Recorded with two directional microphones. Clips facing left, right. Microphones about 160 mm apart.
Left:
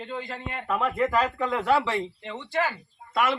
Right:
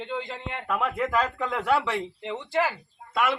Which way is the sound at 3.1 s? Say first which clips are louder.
Left 1 dB; centre (ahead or behind).